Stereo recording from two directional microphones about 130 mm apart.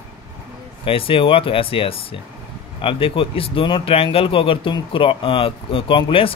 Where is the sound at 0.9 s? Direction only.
45° left (ahead or behind).